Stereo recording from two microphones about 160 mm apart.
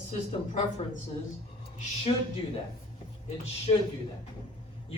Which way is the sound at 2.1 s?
35° left (ahead or behind).